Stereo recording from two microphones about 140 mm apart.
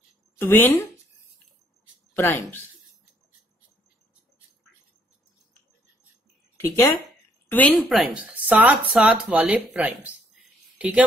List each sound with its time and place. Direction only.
0.4 s speech: 15° left (ahead or behind)
2.1 s speech: 15° left (ahead or behind)
6.5 s a woman's voice: 20° left (ahead or behind)
7.9 s speech: 5° right (ahead or behind)